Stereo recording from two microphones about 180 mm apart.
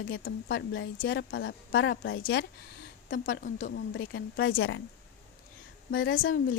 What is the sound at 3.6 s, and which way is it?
Speech, 75° left (ahead or behind).